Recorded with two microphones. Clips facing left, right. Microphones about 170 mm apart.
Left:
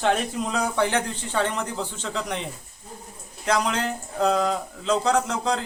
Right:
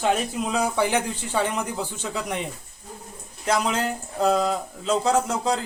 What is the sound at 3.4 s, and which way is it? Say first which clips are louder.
Speech: even; 5° right (ahead or behind).